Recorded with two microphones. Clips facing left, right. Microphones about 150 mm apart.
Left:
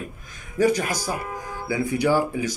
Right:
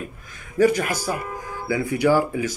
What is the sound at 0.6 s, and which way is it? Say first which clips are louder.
Speech: right 2 dB; 15° left (ahead or behind).